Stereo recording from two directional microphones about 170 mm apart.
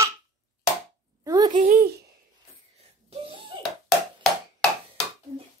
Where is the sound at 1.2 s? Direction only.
20° right (ahead or behind).